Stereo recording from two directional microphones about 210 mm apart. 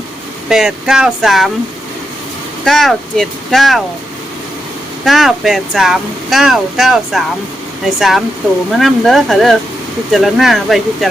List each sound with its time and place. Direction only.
0.4 s speech: centre (ahead or behind)
2.6 s speech: centre (ahead or behind)
5.0 s speech: centre (ahead or behind)